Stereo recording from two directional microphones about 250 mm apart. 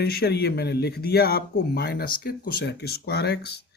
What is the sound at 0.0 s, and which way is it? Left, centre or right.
Speech, left.